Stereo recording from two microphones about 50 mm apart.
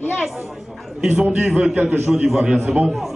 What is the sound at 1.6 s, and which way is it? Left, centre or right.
A man's voice, centre.